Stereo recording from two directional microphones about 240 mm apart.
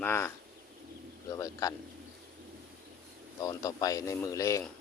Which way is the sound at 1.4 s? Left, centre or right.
Centre.